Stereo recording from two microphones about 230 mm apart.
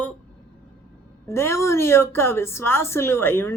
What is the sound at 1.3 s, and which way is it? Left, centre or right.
A woman's voice, centre.